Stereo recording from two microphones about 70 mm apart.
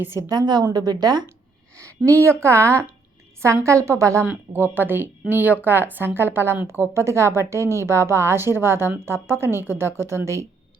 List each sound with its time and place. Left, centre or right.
0.3 s a woman's voice: right
2.0 s a woman's voice: right
4.5 s a woman's voice: right